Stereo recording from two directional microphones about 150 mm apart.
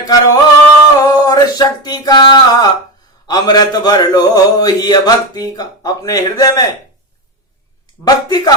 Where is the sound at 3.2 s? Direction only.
25° left (ahead or behind).